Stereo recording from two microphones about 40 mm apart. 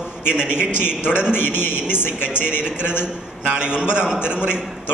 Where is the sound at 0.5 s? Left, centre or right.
Left.